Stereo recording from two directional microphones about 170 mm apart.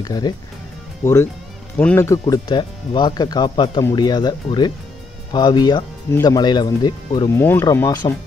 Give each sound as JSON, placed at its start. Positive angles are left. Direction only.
{"t": 0.0, "sound": "speech", "side_deg": 25}
{"t": 7.3, "sound": "speech", "side_deg": 10}